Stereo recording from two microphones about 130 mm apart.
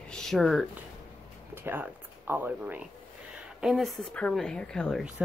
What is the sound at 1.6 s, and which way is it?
Speech, 15° right (ahead or behind).